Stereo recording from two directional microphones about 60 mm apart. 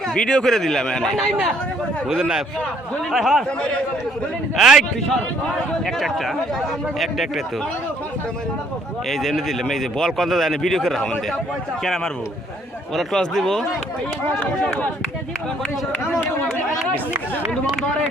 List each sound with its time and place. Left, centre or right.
0.1 s speech: centre
2.0 s speech: centre
3.6 s speech: centre
4.5 s speech: centre
9.0 s speech: centre
14.3 s speech: centre